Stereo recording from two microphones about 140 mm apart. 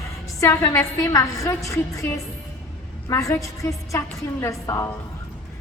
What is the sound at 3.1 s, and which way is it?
A woman's voice, 20° left (ahead or behind).